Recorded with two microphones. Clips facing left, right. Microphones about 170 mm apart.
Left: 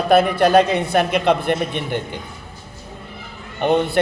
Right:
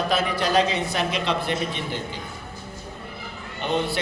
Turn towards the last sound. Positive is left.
turn(degrees=55)  # may be behind; listen again after turning